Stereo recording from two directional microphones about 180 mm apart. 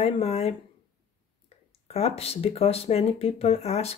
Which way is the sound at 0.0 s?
35° left (ahead or behind).